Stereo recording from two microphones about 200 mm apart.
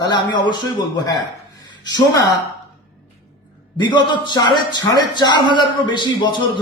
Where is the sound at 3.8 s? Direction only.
20° left (ahead or behind).